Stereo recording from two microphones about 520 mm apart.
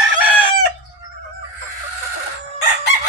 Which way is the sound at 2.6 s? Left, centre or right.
Left.